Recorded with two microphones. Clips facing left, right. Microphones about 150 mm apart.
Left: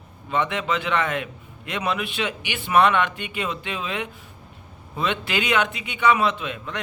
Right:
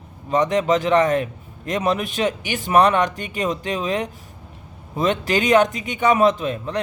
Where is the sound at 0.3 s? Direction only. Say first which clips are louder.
Right 6 dB; 40° right (ahead or behind).